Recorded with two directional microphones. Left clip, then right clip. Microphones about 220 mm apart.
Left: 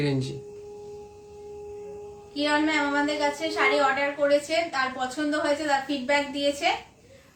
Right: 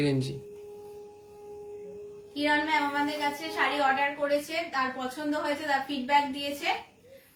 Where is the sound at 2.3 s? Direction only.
15° left (ahead or behind).